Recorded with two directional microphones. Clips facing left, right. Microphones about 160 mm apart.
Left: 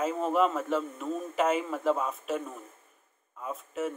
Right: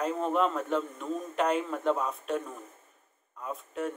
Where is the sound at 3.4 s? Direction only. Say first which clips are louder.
Left 1 dB; centre (ahead or behind).